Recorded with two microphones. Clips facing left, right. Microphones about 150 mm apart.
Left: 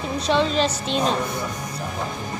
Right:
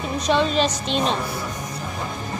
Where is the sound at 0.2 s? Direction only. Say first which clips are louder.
Right 1 dB; 15° right (ahead or behind).